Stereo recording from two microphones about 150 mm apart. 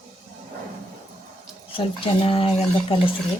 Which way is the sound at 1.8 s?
35° left (ahead or behind).